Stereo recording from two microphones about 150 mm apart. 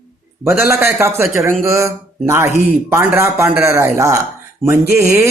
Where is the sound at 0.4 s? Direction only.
15° right (ahead or behind).